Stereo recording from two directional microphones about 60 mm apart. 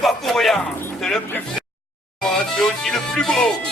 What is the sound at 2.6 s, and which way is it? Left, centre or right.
Speech, centre.